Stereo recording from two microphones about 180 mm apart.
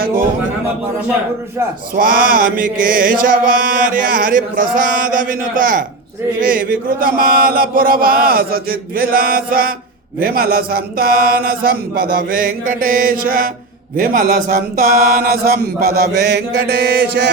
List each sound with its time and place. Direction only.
2.0 s mantra: 50° right (ahead or behind); by 17.3 s 65° right (ahead or behind)